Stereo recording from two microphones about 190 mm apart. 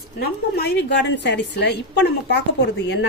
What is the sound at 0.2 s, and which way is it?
A woman's voice, 55° left (ahead or behind).